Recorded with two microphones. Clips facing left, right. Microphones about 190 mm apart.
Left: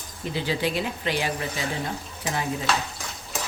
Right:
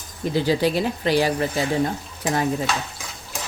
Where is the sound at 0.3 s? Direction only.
40° right (ahead or behind).